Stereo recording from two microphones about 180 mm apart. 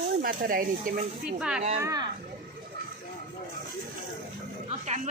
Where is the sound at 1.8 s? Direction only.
20° right (ahead or behind).